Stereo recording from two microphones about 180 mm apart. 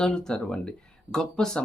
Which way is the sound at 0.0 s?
5° left (ahead or behind).